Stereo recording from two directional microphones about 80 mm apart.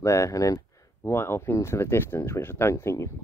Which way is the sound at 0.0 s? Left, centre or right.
Left.